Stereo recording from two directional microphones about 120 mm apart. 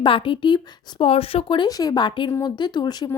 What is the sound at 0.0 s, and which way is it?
Speech, 45° left (ahead or behind).